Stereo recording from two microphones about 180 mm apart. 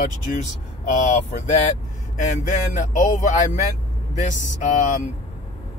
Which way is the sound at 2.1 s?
45° left (ahead or behind).